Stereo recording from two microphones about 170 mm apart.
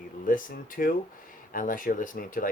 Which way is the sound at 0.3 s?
55° left (ahead or behind).